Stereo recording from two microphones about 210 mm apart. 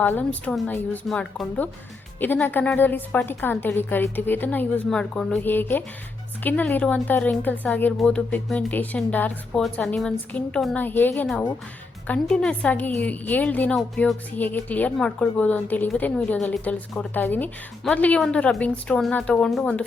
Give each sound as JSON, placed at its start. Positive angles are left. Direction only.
{"t": 0.0, "sound": "a woman's voice", "side_deg": 5}